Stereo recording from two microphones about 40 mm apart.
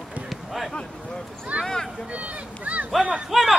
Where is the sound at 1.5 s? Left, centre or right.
Right.